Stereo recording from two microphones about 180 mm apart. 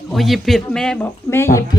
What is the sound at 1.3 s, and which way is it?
Speech, 15° left (ahead or behind).